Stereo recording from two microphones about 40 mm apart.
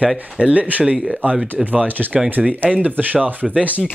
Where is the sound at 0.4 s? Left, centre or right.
Right.